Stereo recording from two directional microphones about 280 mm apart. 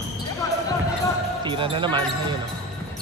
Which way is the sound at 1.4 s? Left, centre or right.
Centre.